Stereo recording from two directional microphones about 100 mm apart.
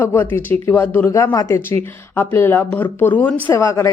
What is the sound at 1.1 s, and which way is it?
A man's voice, 35° left (ahead or behind).